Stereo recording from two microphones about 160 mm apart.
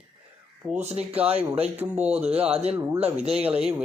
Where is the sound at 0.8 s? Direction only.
40° right (ahead or behind).